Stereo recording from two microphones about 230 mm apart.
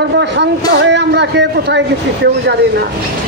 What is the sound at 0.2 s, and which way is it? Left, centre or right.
A man's voice, right.